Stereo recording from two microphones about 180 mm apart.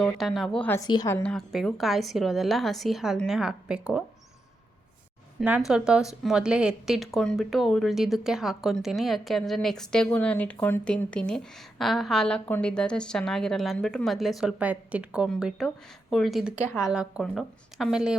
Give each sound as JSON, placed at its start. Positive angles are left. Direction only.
{"t": 0.0, "sound": "speech", "side_deg": 0}
{"t": 0.8, "sound": "a woman's voice", "side_deg": 20}
{"t": 1.1, "sound": "speech", "side_deg": 5}
{"t": 5.4, "sound": "speech", "side_deg": -5}